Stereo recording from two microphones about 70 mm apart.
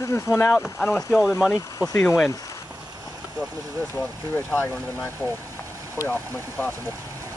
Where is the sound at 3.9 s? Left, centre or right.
Left.